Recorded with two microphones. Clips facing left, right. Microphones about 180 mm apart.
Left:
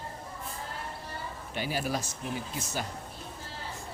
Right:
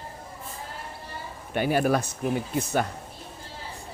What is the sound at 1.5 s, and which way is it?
Speech, 55° right (ahead or behind).